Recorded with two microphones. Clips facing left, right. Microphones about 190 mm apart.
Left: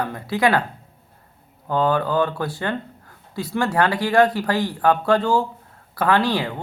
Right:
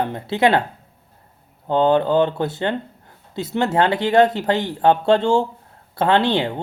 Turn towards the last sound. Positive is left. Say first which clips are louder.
# right 2 dB
turn(degrees=-25)  # may be behind; listen again after turning